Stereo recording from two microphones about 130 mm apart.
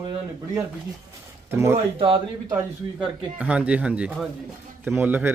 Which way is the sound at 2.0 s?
45° right (ahead or behind).